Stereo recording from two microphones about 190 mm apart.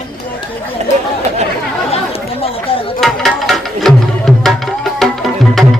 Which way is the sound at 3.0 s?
Centre (ahead or behind).